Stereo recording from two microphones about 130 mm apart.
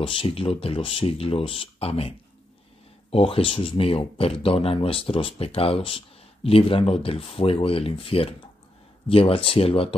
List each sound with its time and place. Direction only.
0.0 s speech: 45° left (ahead or behind)